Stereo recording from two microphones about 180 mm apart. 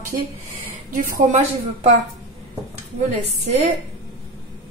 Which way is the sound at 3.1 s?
35° right (ahead or behind).